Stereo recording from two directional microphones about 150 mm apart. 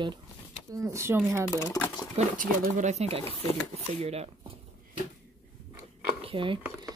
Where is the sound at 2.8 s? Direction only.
50° right (ahead or behind).